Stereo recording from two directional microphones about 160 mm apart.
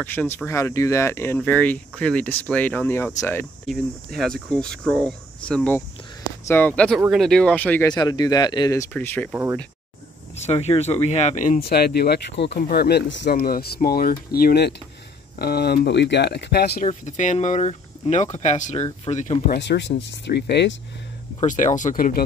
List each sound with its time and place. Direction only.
0.0 s speech: 10° left (ahead or behind)
3.6 s speech: centre (ahead or behind)
7.9 s speech: 25° left (ahead or behind)
8.9 s speech: 10° left (ahead or behind)
9.3 s speech: 10° right (ahead or behind)
10.3 s speech: 45° left (ahead or behind)
11.6 s speech: 80° left
12.5 s speech: 75° left (ahead or behind)
15.3 s speech: 75° left (ahead or behind)
16.8 s speech: 50° left (ahead or behind)
19.6 s speech: 90° left
21.4 s speech: 50° left (ahead or behind)